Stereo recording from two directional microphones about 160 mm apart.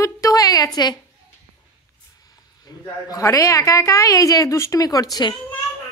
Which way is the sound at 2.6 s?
20° left (ahead or behind).